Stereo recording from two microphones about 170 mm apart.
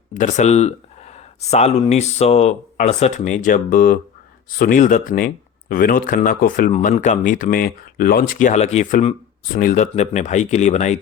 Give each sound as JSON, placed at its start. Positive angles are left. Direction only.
{"t": 0.1, "sound": "speech", "side_deg": 45}